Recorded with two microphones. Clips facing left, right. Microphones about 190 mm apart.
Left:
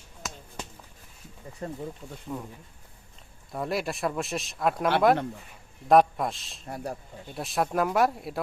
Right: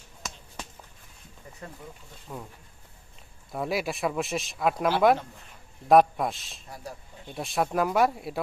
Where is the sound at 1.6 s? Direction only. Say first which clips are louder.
Left 8 dB; 30° left (ahead or behind).